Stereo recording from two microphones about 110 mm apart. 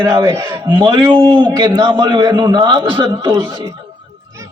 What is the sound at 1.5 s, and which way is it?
A man's voice, 35° right (ahead or behind).